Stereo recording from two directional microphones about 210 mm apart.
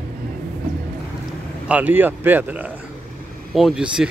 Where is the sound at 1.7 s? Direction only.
5° right (ahead or behind).